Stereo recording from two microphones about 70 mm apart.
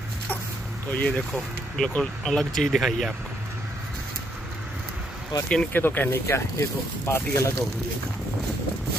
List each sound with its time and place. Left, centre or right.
0.9 s speech: centre
5.3 s speech: left
5.7 s speech: left